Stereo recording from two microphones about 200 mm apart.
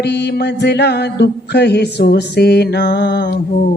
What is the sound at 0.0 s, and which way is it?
Mantra, 55° left (ahead or behind).